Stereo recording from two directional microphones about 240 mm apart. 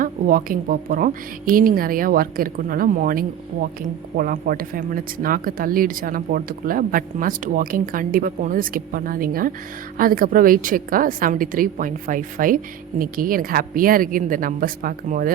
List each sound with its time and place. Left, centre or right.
0.0 s speech: right